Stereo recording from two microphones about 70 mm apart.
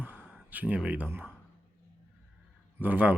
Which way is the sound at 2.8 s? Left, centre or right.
Right.